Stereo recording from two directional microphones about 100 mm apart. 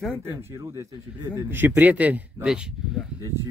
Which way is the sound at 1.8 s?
15° right (ahead or behind).